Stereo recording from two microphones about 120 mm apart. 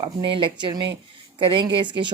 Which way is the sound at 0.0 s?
45° right (ahead or behind).